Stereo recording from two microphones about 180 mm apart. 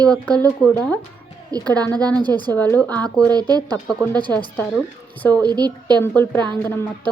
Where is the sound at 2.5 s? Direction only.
10° left (ahead or behind).